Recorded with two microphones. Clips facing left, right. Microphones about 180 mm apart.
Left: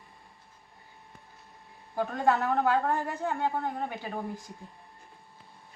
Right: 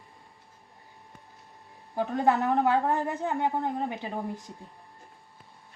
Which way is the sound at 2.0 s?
20° right (ahead or behind).